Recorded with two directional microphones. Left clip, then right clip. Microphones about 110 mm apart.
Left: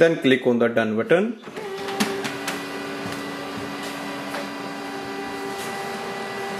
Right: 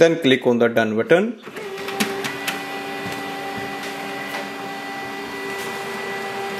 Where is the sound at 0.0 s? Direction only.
30° right (ahead or behind).